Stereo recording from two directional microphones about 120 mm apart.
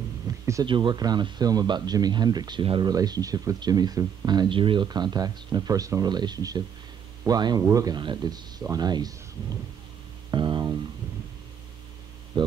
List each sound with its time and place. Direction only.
0.3 s a sound: 30° right (ahead or behind)
0.7 s speech: 40° right (ahead or behind)
2.6 s speech: 50° right (ahead or behind)
2.9 s speech: 30° right (ahead or behind)
10.3 s a sound: 40° right (ahead or behind)
12.4 s speech: 40° right (ahead or behind)